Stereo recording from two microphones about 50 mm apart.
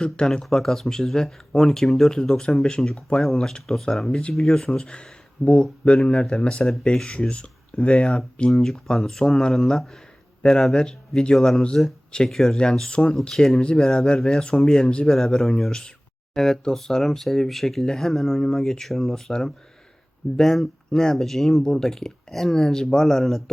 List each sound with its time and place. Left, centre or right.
0.0 s speech: centre
8.5 s speech: centre
11.3 s speech: centre
12.5 s speech: centre
13.2 s speech: centre
14.8 s speech: centre
15.1 s speech: centre
19.3 s speech: centre